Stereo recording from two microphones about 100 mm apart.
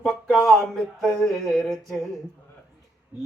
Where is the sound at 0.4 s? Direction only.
Centre (ahead or behind).